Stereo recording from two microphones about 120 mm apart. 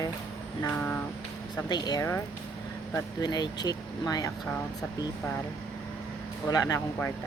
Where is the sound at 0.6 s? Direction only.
10° left (ahead or behind).